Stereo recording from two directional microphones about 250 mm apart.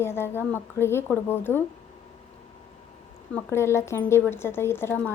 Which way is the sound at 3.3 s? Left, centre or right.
Centre.